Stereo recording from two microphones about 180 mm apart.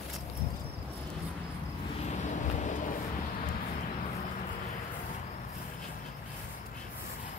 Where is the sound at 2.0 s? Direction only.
40° left (ahead or behind).